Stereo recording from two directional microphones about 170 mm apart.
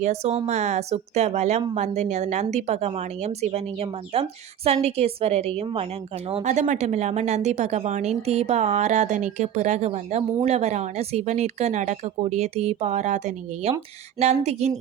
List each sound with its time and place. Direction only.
0.0 s a woman's voice: 40° right (ahead or behind)